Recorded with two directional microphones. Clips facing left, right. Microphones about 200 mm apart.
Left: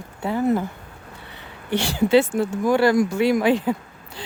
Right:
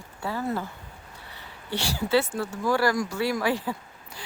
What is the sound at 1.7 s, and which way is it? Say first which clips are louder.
Speech: left 7 dB; 20° left (ahead or behind).